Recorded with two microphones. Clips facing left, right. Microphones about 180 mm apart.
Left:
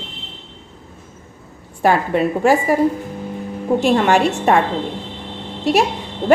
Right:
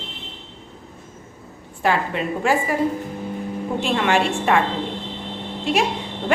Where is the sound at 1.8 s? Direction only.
40° left (ahead or behind).